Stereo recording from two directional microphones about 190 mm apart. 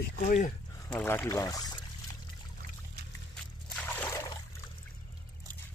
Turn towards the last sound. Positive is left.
turn(degrees=10)  # may be behind; listen again after turning